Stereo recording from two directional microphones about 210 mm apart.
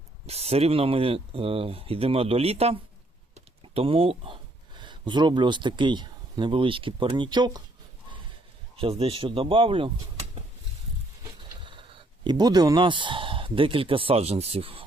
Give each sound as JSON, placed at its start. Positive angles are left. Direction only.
{"t": 0.3, "sound": "speech", "side_deg": -30}
{"t": 3.3, "sound": "typing", "side_deg": -25}
{"t": 4.8, "sound": "speech", "side_deg": -20}
{"t": 8.7, "sound": "speech", "side_deg": -25}
{"t": 11.6, "sound": "speech", "side_deg": -25}